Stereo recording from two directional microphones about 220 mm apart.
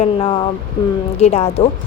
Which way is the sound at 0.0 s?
25° left (ahead or behind).